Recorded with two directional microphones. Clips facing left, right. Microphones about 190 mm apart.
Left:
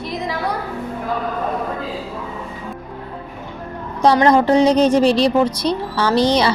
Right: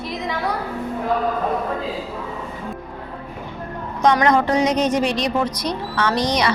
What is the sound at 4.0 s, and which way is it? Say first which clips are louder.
A woman's voice: left 3 dB; 30° left (ahead or behind).